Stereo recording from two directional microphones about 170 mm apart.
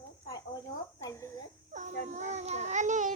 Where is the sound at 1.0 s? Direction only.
15° left (ahead or behind).